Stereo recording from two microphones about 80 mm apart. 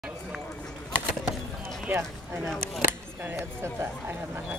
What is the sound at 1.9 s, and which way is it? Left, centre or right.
Speech, right.